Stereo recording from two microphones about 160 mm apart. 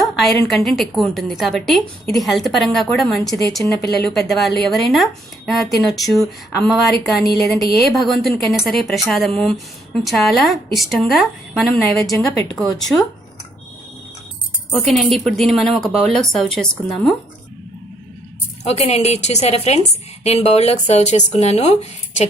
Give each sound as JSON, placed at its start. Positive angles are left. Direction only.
{"t": 0.2, "sound": "speech", "side_deg": 0}
{"t": 14.7, "sound": "speech", "side_deg": 0}
{"t": 18.6, "sound": "speech", "side_deg": 40}